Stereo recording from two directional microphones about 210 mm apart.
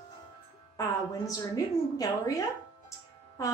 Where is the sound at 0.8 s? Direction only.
15° left (ahead or behind).